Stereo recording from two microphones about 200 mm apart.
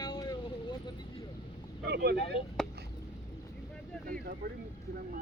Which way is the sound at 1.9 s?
60° right (ahead or behind).